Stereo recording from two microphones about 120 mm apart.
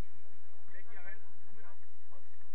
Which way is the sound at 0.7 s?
35° right (ahead or behind).